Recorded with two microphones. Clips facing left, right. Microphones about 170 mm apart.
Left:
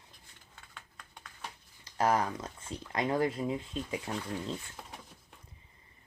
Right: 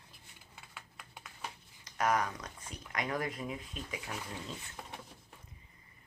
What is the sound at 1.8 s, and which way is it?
Speech, 30° left (ahead or behind).